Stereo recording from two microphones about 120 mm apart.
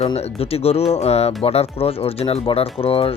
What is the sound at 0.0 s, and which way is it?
Speech, 55° left (ahead or behind).